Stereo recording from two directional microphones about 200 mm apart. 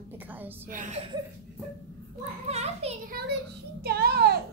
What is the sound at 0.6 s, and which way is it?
Speech, 40° right (ahead or behind).